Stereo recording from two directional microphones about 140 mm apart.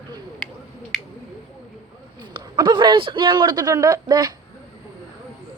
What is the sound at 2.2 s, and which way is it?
A man's voice, 35° right (ahead or behind).